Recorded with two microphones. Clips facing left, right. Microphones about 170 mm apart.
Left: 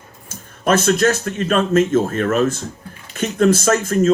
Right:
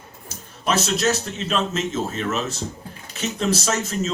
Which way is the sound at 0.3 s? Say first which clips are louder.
Left 7 dB; 50° left (ahead or behind).